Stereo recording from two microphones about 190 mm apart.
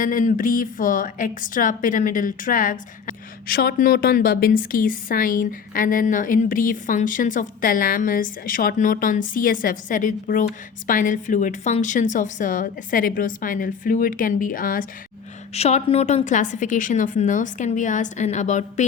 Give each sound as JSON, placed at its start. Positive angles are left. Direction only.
{"t": 0.0, "sound": "a woman's voice", "side_deg": 45}
{"t": 15.5, "sound": "a woman's voice", "side_deg": 35}